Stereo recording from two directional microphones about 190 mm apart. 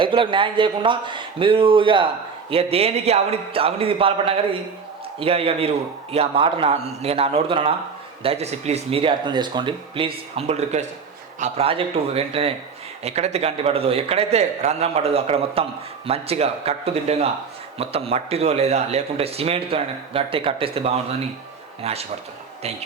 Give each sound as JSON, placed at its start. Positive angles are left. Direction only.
{"t": 0.0, "sound": "a man's voice", "side_deg": -25}